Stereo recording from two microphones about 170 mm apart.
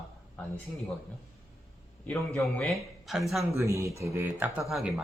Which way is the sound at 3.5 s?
15° right (ahead or behind).